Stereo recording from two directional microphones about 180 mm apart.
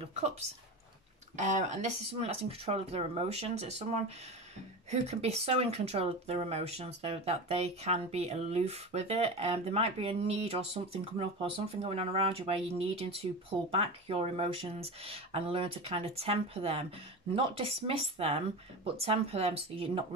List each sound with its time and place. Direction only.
0.0 s speech: 35° right (ahead or behind)
5.0 s speech: 35° right (ahead or behind)